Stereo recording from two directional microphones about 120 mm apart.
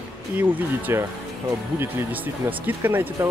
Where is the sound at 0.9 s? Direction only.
20° right (ahead or behind).